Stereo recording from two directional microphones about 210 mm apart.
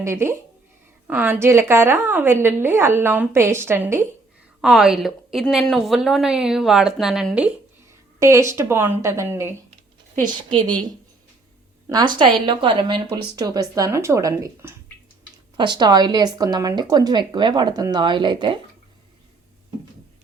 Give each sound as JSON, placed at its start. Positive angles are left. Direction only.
{"t": 0.0, "sound": "a woman's voice", "side_deg": -10}
{"t": 11.9, "sound": "a woman's voice", "side_deg": -20}